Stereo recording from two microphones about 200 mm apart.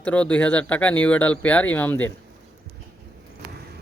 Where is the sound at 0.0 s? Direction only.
5° left (ahead or behind).